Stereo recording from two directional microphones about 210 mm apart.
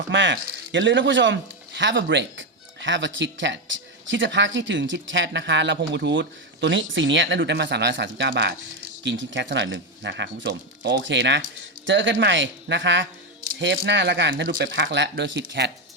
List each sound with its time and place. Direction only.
0.1 s speech: 60° right (ahead or behind)